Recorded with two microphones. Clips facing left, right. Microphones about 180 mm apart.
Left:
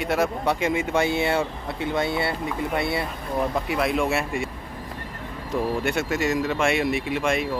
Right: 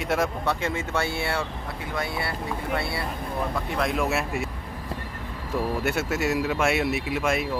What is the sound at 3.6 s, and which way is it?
Speech, 5° left (ahead or behind).